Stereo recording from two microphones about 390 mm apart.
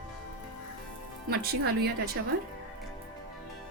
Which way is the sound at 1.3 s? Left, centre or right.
Right.